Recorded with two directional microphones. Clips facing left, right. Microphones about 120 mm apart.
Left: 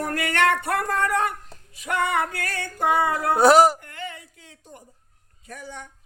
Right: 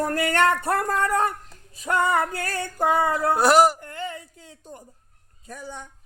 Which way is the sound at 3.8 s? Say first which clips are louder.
Right 3 dB; 35° right (ahead or behind).